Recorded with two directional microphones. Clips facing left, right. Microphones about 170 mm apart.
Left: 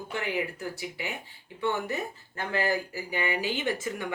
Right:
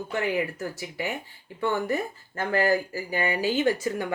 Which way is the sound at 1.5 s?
45° right (ahead or behind).